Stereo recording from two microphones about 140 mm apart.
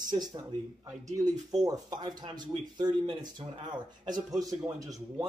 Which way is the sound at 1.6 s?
30° right (ahead or behind).